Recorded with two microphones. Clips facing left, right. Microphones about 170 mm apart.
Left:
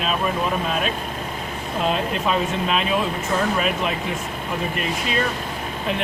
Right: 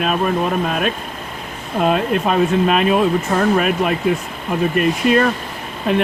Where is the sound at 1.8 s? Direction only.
55° right (ahead or behind).